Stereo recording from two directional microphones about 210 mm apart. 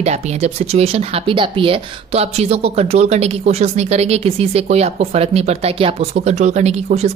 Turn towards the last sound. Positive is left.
turn(degrees=-30)  # may be behind; listen again after turning